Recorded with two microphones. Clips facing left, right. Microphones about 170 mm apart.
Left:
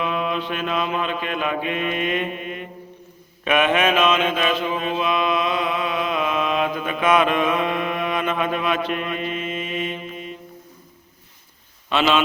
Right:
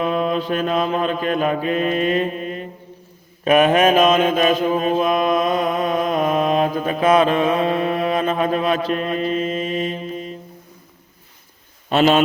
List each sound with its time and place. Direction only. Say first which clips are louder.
0.0 s mantra: right 4 dB; 40° right (ahead or behind)
11.9 s a man's voice: right 5 dB; 45° right (ahead or behind)